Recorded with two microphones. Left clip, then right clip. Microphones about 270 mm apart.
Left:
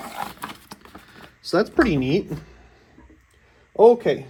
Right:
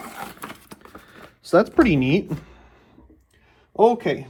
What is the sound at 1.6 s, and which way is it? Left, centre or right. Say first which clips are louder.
Speech: right 2 dB; centre.